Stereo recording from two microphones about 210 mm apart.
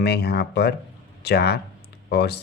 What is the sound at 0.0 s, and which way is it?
Speech, 50° left (ahead or behind).